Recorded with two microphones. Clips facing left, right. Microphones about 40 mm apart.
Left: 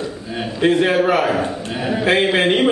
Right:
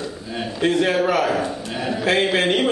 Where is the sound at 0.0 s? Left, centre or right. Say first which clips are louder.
Left 3 dB; centre.